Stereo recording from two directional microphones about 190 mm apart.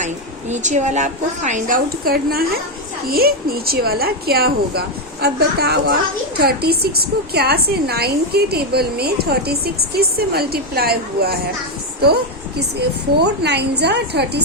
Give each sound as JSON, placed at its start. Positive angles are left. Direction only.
{"t": 0.0, "sound": "a woman's voice", "side_deg": -40}
{"t": 13.2, "sound": "a woman's voice", "side_deg": -60}